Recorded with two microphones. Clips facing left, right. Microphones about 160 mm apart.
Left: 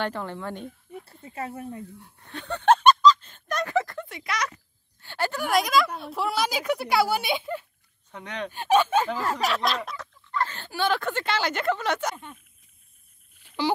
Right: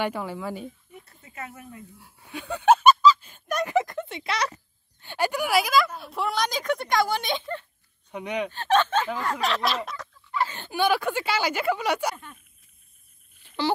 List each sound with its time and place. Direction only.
0.0 s speech: 10° right (ahead or behind)
0.9 s speech: 30° left (ahead or behind)
2.0 s a sound: 5° right (ahead or behind); by 4.6 s 30° right (ahead or behind)
5.0 s speech: 15° right (ahead or behind); by 7.6 s 10° left (ahead or behind)
8.1 s speech: 10° right (ahead or behind)
8.5 s speech: 10° left (ahead or behind); by 12.2 s 10° right (ahead or behind)
13.6 s speech: 10° left (ahead or behind)